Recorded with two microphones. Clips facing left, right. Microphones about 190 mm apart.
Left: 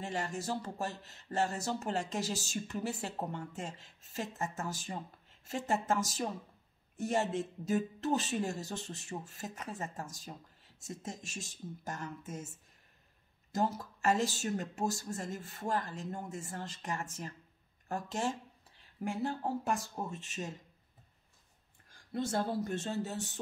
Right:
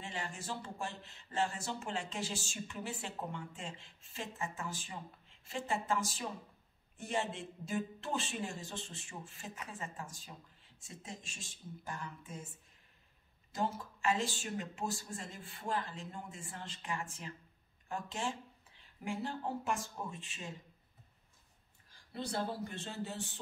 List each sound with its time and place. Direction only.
0.0 s speech: 40° left (ahead or behind)
13.5 s speech: 40° left (ahead or behind)
21.9 s speech: 45° left (ahead or behind)